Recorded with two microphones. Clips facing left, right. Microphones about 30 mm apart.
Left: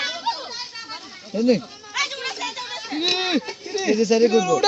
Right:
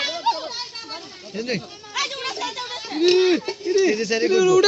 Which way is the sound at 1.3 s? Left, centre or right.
Right.